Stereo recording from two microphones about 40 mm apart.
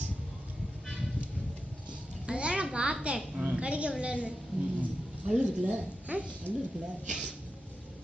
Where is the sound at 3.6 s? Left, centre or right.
Right.